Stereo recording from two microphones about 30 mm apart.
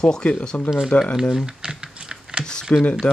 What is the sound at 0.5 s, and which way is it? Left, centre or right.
Speech, left.